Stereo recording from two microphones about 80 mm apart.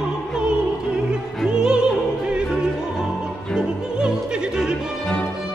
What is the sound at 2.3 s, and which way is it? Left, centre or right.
Music, centre.